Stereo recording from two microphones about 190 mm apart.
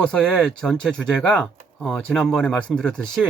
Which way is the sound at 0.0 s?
5° left (ahead or behind).